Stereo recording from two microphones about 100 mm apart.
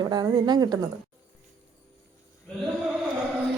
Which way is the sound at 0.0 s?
45° right (ahead or behind).